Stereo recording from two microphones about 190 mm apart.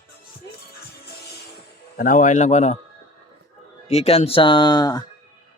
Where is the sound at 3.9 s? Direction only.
30° left (ahead or behind).